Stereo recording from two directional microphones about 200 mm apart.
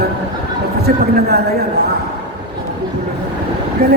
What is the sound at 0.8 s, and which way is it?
Speech, 50° right (ahead or behind).